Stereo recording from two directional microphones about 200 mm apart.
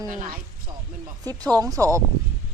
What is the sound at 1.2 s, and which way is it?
Speech, 20° right (ahead or behind).